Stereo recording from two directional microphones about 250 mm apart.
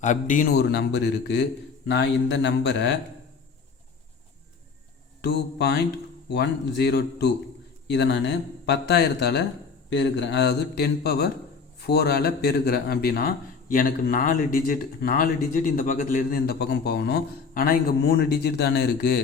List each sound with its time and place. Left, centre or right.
0.0 s a man's voice: left
5.2 s a man's voice: left